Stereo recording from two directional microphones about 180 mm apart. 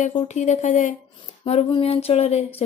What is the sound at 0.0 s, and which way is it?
Speech, 40° left (ahead or behind).